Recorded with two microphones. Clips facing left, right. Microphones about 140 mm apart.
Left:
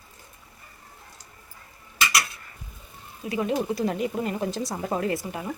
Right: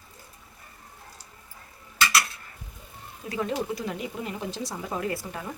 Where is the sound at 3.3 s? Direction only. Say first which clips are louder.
Left 3 dB; 15° left (ahead or behind).